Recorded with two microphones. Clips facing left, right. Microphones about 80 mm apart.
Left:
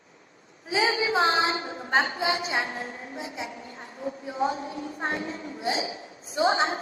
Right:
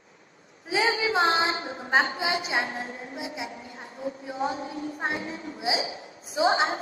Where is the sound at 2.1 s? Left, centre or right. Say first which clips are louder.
Even; left.